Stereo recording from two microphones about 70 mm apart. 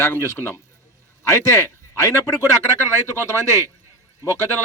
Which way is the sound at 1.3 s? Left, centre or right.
Left.